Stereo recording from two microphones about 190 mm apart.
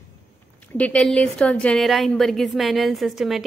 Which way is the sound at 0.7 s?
5° left (ahead or behind).